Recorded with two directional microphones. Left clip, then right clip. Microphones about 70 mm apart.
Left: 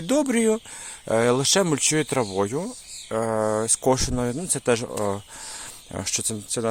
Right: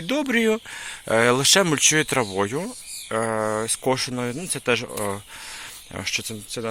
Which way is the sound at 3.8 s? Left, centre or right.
Left.